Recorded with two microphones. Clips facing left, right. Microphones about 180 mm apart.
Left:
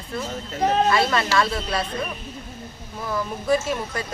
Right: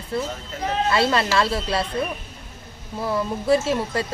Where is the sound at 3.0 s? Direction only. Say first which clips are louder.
Right 3 dB; 30° right (ahead or behind).